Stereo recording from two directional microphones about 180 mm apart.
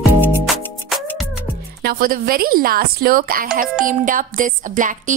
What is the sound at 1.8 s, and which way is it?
A woman's voice, 55° right (ahead or behind).